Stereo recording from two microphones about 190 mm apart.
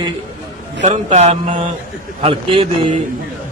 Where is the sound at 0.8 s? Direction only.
35° right (ahead or behind).